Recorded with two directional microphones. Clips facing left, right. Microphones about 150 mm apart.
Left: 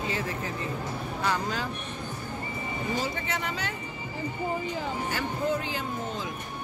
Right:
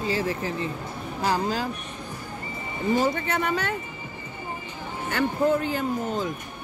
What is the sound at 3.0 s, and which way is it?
Speech, 55° right (ahead or behind).